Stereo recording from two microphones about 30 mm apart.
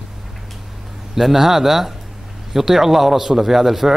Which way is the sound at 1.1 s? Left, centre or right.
Centre.